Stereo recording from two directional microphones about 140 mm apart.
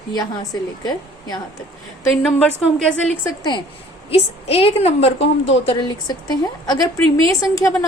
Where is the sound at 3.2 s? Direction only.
25° left (ahead or behind).